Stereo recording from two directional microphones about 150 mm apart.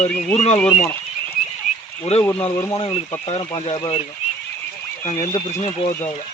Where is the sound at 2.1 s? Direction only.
45° left (ahead or behind).